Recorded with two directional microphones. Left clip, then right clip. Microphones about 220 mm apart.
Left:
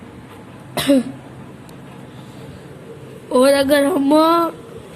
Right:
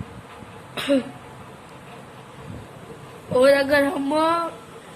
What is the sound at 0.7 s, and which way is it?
Throat clearing, 45° left (ahead or behind).